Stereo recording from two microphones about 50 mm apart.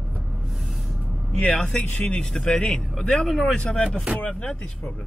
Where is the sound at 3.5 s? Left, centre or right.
Left.